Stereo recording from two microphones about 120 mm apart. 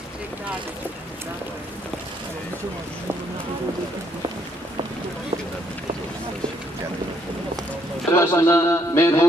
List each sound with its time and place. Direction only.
8.1 s a man's voice: 25° left (ahead or behind)